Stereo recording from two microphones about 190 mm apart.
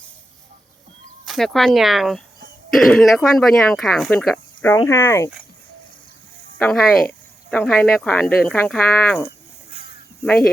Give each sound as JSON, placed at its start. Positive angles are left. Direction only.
{"t": 1.2, "sound": "speech", "side_deg": 0}
{"t": 6.6, "sound": "speech", "side_deg": 5}